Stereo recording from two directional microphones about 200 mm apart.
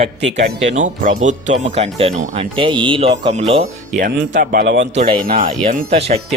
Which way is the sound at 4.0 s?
45° right (ahead or behind).